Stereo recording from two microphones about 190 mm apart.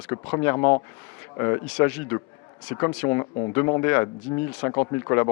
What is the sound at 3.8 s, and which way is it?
Speech, 15° left (ahead or behind).